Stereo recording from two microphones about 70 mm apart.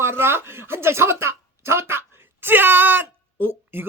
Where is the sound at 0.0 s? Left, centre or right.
Right.